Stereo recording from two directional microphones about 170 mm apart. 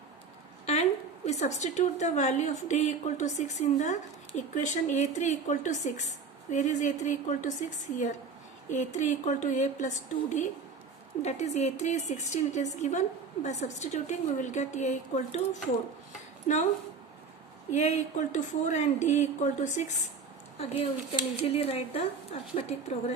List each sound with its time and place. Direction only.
0.6 s a woman's voice: 40° left (ahead or behind)
8.7 s a woman's voice: 45° left (ahead or behind)
17.7 s a woman's voice: 45° left (ahead or behind)
20.6 s speech: 30° left (ahead or behind)